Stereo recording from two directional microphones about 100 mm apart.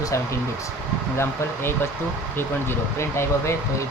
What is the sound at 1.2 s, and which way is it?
Speech, 25° left (ahead or behind).